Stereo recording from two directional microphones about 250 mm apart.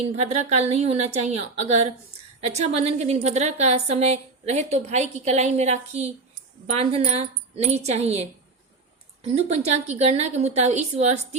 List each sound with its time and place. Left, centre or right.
0.0 s a woman's voice: right